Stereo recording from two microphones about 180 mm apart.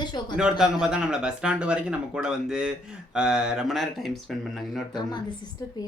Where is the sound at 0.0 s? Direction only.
25° left (ahead or behind).